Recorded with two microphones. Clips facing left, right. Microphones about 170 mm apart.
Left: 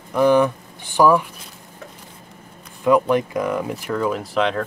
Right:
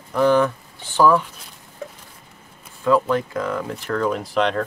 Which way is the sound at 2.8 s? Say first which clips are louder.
Left 2 dB; 15° left (ahead or behind).